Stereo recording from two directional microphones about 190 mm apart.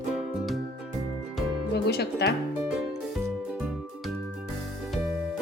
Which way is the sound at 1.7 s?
60° left (ahead or behind).